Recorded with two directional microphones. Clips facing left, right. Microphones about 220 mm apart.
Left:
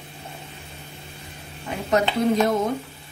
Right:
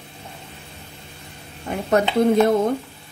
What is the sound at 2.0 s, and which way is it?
Speech, 55° right (ahead or behind).